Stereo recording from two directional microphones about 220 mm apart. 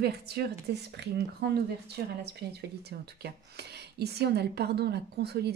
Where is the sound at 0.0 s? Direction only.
45° right (ahead or behind).